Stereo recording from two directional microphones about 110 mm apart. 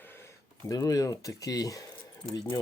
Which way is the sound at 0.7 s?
35° left (ahead or behind).